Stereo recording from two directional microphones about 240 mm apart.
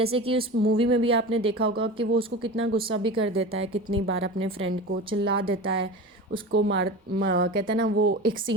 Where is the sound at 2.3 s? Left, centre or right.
Right.